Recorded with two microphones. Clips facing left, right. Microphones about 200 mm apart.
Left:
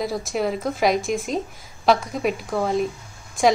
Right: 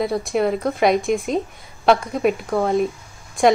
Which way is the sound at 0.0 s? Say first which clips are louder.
Right 4 dB; centre (ahead or behind).